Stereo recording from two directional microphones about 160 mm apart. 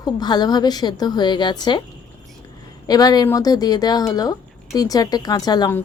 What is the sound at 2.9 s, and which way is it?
A woman's voice, 25° left (ahead or behind).